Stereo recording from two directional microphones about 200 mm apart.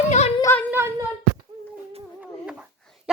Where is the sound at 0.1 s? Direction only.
35° left (ahead or behind).